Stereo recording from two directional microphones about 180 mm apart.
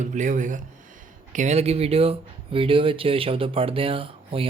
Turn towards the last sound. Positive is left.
turn(degrees=-30)  # may be behind; listen again after turning